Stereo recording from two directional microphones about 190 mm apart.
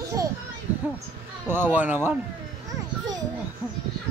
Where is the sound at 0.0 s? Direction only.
15° right (ahead or behind).